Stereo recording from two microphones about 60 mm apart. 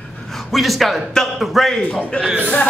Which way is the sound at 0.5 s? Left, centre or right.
Centre.